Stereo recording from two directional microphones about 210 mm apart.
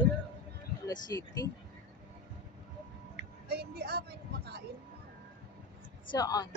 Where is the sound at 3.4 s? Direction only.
50° right (ahead or behind).